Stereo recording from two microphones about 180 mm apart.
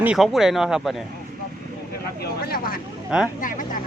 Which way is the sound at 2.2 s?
60° left (ahead or behind).